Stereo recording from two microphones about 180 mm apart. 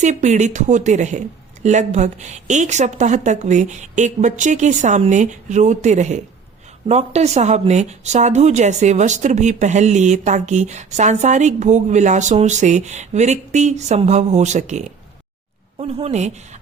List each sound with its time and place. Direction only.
0.0 s a woman's voice: 40° right (ahead or behind)